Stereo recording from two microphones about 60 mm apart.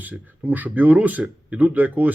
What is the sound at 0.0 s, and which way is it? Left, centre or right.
Speech, right.